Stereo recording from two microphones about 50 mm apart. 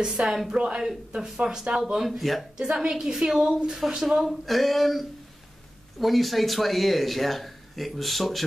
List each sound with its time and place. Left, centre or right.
0.0 s a woman's voice: centre
2.0 s speech: centre
2.6 s a woman's voice: centre
4.3 s speech: centre